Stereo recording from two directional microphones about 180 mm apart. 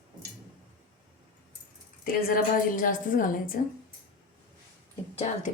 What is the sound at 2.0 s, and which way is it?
A woman's voice, 50° left (ahead or behind).